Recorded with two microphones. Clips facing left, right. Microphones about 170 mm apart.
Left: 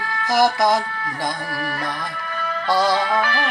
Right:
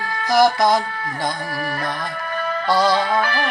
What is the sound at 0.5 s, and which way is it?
Speech, 20° right (ahead or behind).